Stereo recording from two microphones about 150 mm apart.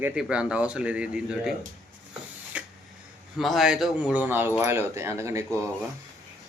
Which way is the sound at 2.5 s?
10° right (ahead or behind).